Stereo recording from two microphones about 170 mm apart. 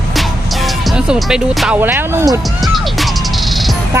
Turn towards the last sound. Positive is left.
turn(degrees=0)  # may be behind; listen again after turning